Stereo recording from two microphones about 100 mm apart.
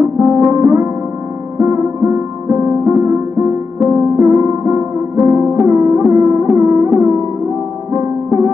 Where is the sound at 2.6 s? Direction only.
15° right (ahead or behind).